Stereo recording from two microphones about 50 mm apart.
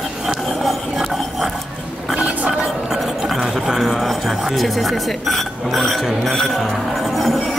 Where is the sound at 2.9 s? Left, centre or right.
Centre.